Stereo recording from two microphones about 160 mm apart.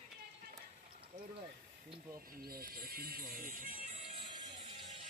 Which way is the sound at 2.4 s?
65° right (ahead or behind).